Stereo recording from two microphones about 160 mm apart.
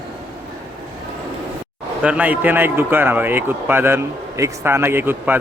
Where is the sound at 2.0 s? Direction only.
10° right (ahead or behind).